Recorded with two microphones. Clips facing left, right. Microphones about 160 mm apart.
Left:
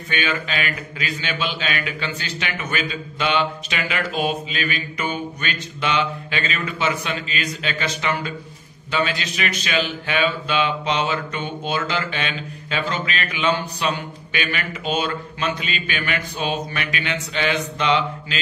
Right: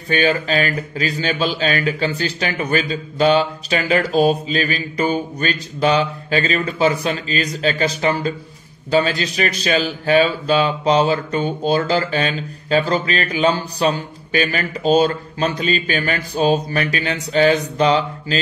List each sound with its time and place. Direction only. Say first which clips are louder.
0.1 s speech: right 8 dB; 40° right (ahead or behind)